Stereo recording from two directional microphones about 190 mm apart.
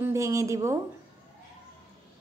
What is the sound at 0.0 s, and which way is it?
Speech, 15° right (ahead or behind).